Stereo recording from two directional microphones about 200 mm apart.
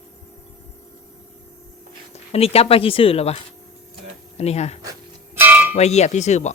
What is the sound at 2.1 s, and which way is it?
Speech, 30° left (ahead or behind).